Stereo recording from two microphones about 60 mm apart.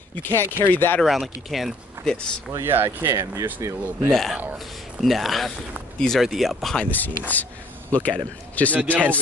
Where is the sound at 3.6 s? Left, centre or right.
Right.